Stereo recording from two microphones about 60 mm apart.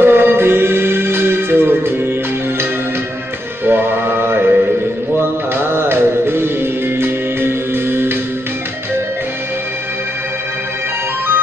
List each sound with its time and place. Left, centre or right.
0.0 s music: right
3.6 s mantra: right
5.6 s music: right